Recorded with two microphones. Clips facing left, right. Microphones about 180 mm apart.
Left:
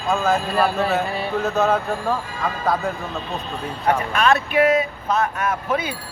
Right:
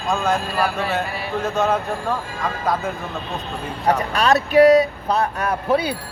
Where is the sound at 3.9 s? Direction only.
35° right (ahead or behind).